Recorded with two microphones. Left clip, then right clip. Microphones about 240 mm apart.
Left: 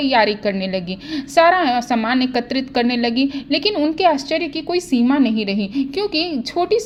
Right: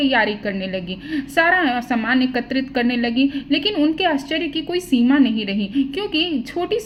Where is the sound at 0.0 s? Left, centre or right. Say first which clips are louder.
Left 2 dB; left.